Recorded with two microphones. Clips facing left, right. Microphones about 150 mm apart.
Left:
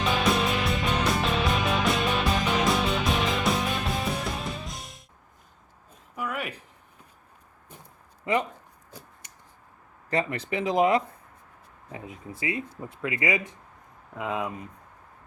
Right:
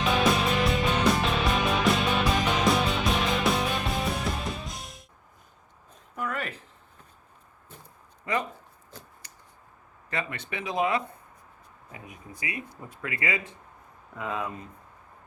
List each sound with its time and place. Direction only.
0.0 s music: centre (ahead or behind)
6.1 s a sound: 10° left (ahead or behind)
8.2 s speech: 20° left (ahead or behind)
10.1 s speech: 35° left (ahead or behind); by 14.7 s 15° left (ahead or behind)